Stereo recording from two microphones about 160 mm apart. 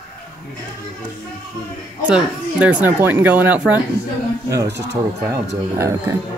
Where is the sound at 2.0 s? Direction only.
10° right (ahead or behind).